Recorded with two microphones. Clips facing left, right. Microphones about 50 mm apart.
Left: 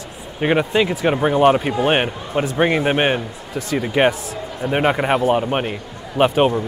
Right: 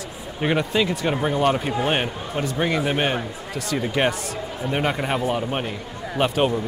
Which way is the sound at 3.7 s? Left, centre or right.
Left.